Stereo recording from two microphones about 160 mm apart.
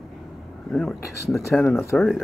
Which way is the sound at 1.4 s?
15° left (ahead or behind).